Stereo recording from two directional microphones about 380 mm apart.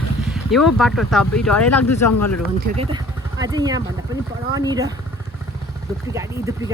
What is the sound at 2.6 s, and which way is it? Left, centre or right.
Speech, centre.